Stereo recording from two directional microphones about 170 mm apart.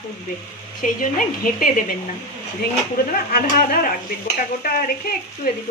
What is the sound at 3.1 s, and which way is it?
Speech, 60° left (ahead or behind).